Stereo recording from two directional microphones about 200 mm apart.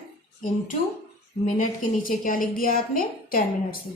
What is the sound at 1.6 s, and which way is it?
A woman's voice, 40° left (ahead or behind).